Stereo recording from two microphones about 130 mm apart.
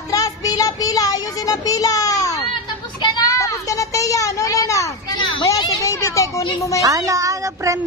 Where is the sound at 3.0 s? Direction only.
30° left (ahead or behind).